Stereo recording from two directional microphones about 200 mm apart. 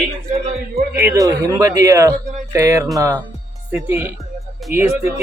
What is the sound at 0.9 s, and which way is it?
A man's voice, 15° right (ahead or behind).